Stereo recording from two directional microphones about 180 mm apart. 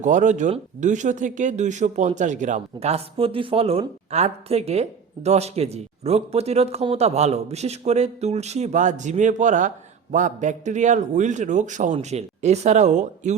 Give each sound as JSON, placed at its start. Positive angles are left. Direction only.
{"t": 0.0, "sound": "speech", "side_deg": -45}